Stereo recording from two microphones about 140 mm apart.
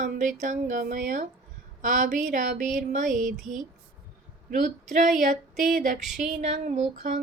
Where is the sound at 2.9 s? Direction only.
70° right (ahead or behind).